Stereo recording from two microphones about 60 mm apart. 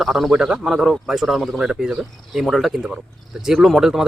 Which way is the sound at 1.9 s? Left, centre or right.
Centre.